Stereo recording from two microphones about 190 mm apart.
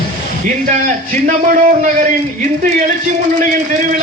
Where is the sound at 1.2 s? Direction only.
45° right (ahead or behind).